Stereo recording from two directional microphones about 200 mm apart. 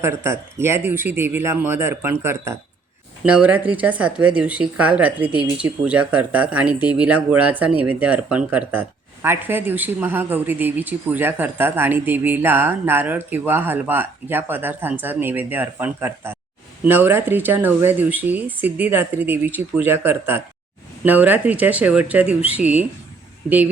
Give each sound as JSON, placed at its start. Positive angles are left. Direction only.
{"t": 0.0, "sound": "speech", "side_deg": -10}